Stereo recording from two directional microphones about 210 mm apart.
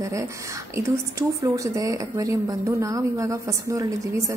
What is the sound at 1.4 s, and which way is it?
Speech, 15° right (ahead or behind).